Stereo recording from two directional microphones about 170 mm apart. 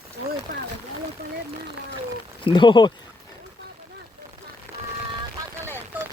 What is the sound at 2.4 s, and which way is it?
Speech, 30° left (ahead or behind).